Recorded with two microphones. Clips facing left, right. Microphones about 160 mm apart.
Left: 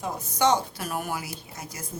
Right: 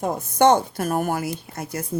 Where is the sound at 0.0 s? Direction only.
55° right (ahead or behind).